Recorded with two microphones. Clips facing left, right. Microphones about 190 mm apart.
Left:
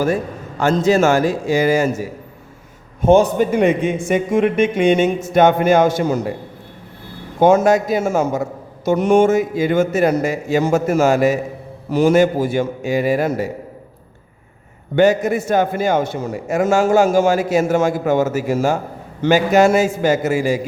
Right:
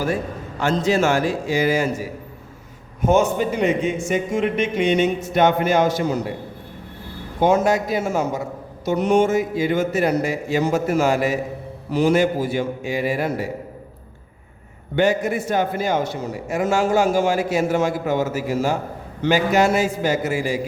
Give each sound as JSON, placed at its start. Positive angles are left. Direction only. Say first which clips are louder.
{"t": 0.6, "sound": "a man's voice", "louder": "left 5 dB", "side_deg": 45}
{"t": 3.0, "sound": "a man's voice", "louder": "left 5 dB", "side_deg": 30}
{"t": 3.3, "sound": "a man's voice", "louder": "left 5 dB", "side_deg": 55}
{"t": 7.3, "sound": "a man's voice", "louder": "left 5 dB", "side_deg": 45}
{"t": 14.9, "sound": "a man's voice", "louder": "left 5 dB", "side_deg": 45}